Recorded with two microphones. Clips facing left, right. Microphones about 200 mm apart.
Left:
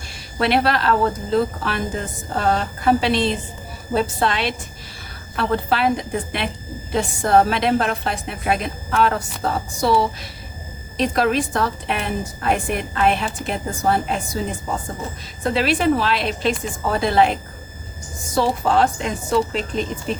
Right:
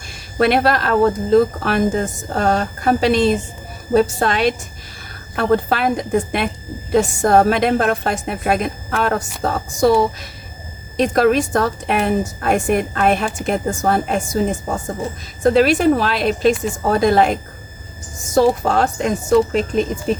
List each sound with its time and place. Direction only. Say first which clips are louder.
0.3 s a woman's voice: right 4 dB; 50° right (ahead or behind)